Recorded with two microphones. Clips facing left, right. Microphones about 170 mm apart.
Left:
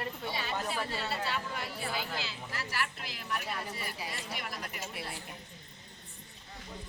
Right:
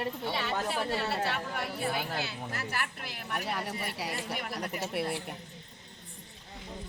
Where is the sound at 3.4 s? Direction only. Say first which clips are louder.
Right 4 dB; 70° right (ahead or behind).